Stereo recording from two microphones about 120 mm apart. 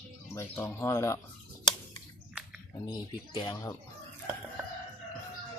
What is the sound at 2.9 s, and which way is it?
Speech, 40° left (ahead or behind).